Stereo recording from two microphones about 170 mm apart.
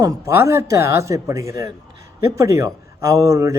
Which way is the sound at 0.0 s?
15° right (ahead or behind).